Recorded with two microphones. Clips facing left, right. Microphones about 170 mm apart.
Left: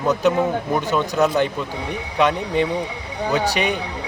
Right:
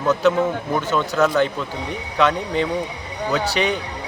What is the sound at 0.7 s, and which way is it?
Speech, 15° left (ahead or behind).